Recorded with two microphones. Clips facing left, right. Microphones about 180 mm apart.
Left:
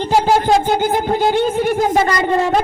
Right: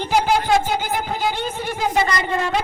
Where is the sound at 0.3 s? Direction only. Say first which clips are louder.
Left 4 dB; 45° left (ahead or behind).